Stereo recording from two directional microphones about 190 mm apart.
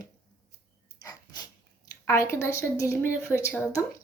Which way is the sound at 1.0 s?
20° left (ahead or behind).